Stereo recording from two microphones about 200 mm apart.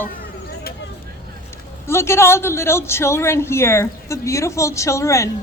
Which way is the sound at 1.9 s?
15° left (ahead or behind).